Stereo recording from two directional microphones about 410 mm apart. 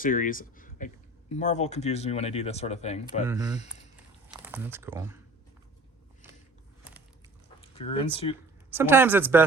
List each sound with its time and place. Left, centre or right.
0.0 s speech: centre
3.2 s speech: centre
7.7 s speech: centre
8.7 s speech: centre